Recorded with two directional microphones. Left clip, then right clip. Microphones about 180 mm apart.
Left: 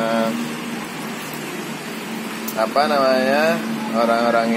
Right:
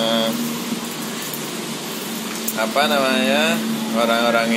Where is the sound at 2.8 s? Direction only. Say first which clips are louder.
Left 1 dB; 50° left (ahead or behind).